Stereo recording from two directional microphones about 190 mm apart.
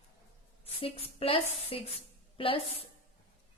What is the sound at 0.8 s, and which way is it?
A woman's voice, 30° left (ahead or behind).